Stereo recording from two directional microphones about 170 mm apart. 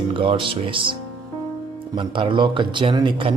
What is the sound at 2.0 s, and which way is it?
Speech, 30° right (ahead or behind).